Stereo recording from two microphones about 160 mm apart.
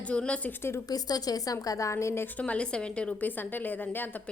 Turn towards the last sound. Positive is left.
turn(degrees=10)  # may be behind; listen again after turning